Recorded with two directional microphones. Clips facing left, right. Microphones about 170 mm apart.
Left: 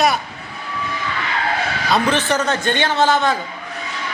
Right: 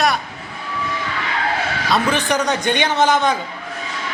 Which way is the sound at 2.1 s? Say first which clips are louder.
Even; 15° right (ahead or behind).